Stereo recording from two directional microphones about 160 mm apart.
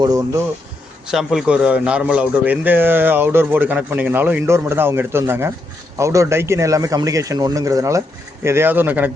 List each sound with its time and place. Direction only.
0.0 s a man's voice: 20° right (ahead or behind)
1.0 s a man's voice: centre (ahead or behind)